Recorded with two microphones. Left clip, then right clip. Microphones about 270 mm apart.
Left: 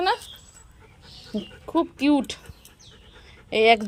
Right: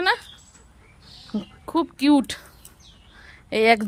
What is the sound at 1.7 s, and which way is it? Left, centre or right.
Speech, centre.